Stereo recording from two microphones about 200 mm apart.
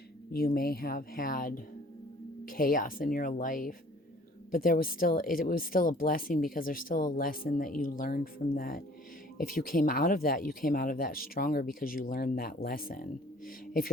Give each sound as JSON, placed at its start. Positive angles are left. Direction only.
{"t": 0.3, "sound": "speech", "side_deg": 50}